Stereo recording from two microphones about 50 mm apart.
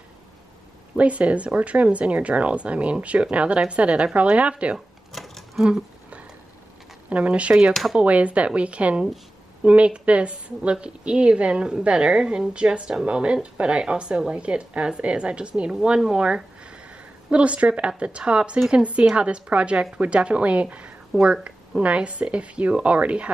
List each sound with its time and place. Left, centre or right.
0.9 s speech: right
4.7 s a sound: centre
5.6 s speech: centre
7.1 s speech: right